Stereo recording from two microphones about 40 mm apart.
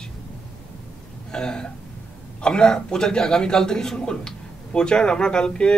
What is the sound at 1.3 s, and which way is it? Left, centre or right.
A man's voice, centre.